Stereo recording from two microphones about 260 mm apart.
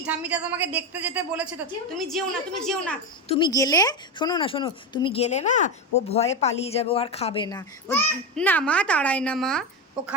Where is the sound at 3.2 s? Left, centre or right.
Centre.